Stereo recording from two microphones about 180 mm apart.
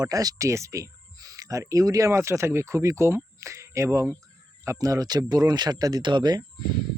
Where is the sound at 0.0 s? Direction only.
20° right (ahead or behind).